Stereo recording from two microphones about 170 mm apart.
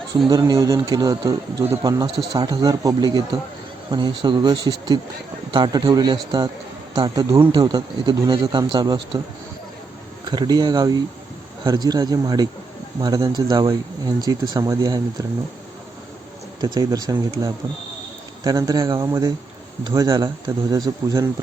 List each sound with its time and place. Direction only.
0.3 s speech: 25° right (ahead or behind)
10.2 s speech: 25° right (ahead or behind)
16.6 s speech: 20° right (ahead or behind)